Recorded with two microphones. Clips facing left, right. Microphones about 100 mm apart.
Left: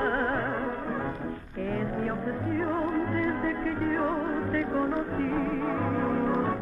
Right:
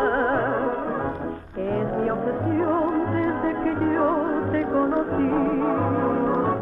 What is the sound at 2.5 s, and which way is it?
Music, 45° right (ahead or behind).